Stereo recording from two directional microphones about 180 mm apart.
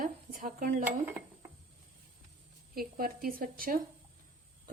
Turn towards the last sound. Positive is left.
turn(degrees=-55)  # may be behind; listen again after turning